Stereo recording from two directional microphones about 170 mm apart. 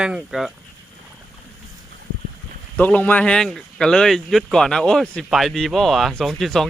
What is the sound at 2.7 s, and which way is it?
Speech, 10° left (ahead or behind).